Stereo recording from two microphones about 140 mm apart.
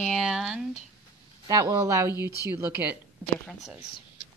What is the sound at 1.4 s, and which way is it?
Speech, 25° right (ahead or behind).